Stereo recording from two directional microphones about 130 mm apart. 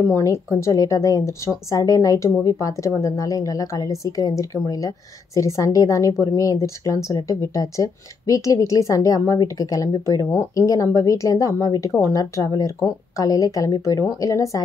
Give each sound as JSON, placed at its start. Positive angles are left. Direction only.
{"t": 0.1, "sound": "speech", "side_deg": 20}